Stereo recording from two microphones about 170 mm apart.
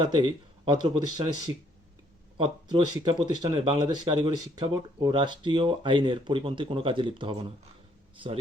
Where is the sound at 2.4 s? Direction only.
30° right (ahead or behind).